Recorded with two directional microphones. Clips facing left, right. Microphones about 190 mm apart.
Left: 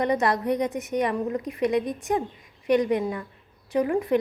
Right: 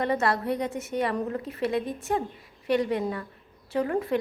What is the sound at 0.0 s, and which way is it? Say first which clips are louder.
A woman's voice: left 2 dB; 20° left (ahead or behind).